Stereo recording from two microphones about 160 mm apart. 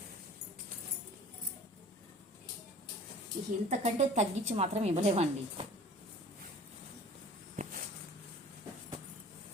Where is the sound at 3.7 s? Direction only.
45° right (ahead or behind).